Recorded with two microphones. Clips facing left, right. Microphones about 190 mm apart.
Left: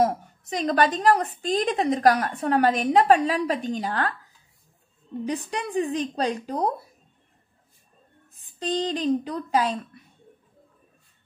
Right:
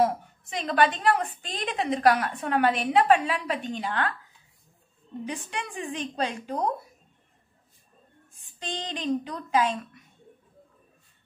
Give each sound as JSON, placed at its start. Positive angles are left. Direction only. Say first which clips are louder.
{"t": 0.0, "sound": "a woman's voice", "louder": "left 2 dB", "side_deg": 40}
{"t": 5.2, "sound": "a woman's voice", "louder": "left 5 dB", "side_deg": 40}
{"t": 8.3, "sound": "a woman's voice", "louder": "left 9 dB", "side_deg": 35}